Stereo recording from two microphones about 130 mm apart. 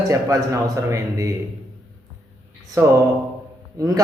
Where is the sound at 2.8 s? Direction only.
25° right (ahead or behind).